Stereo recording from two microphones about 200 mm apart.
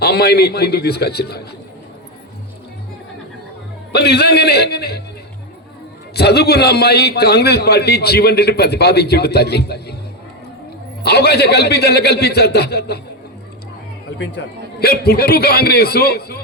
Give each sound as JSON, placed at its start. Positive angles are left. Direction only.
{"t": 0.0, "sound": "a man's voice", "side_deg": 55}
{"t": 3.9, "sound": "a man's voice", "side_deg": 55}
{"t": 6.1, "sound": "a man's voice", "side_deg": 55}
{"t": 11.0, "sound": "a man's voice", "side_deg": 55}
{"t": 14.2, "sound": "a man's voice", "side_deg": 55}